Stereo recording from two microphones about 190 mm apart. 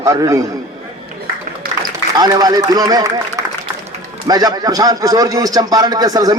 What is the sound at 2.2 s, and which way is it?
Speech, 20° right (ahead or behind).